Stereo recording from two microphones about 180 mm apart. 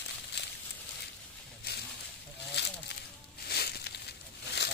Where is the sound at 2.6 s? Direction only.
70° left (ahead or behind).